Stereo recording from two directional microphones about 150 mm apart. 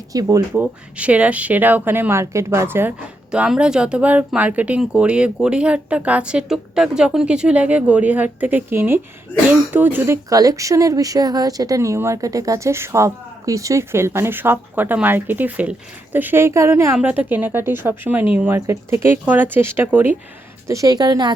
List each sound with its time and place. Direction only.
0.1 s speech: 25° right (ahead or behind)
0.6 s speech: 10° right (ahead or behind)
20.7 s speech: 25° right (ahead or behind)